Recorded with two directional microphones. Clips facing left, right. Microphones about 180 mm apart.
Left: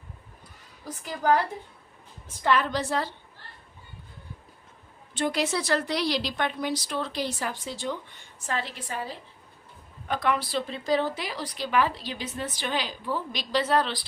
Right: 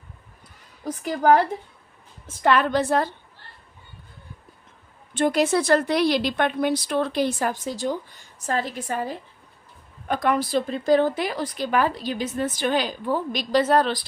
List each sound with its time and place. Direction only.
0.9 s a woman's voice: 65° right (ahead or behind)
2.4 s a woman's voice: 65° right (ahead or behind)
5.1 s speech: 50° right (ahead or behind)